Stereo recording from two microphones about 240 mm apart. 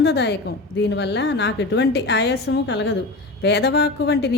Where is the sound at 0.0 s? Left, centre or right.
Left.